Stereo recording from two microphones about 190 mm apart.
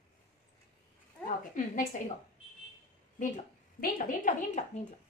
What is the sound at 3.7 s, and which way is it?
Speech, 50° left (ahead or behind).